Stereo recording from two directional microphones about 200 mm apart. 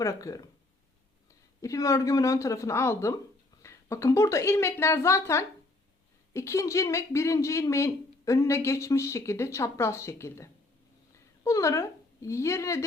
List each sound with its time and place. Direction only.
0.0 s speech: 15° left (ahead or behind)
1.6 s speech: 15° left (ahead or behind)